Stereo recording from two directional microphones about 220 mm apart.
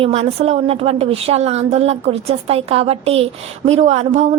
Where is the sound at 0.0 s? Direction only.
30° right (ahead or behind).